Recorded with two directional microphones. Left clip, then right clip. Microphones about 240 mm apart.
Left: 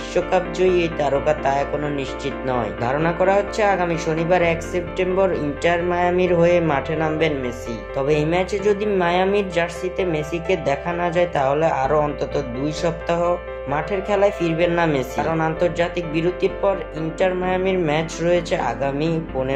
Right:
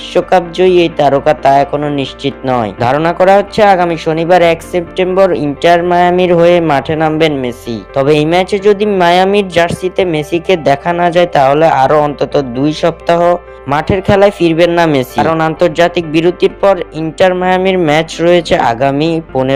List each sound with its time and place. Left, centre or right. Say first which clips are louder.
0.1 s speech: right 10 dB; right